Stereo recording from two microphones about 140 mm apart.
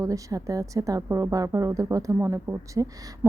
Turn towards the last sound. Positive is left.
turn(degrees=-20)  # may be behind; listen again after turning